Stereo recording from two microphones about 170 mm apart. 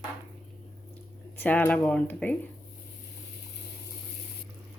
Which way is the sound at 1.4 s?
10° left (ahead or behind).